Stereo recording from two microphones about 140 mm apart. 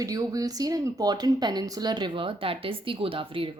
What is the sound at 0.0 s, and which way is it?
Speech, 25° right (ahead or behind).